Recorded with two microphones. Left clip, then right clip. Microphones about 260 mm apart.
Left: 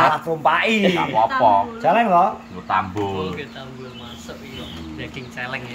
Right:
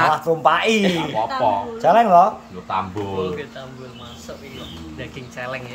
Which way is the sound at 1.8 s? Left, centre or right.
Right.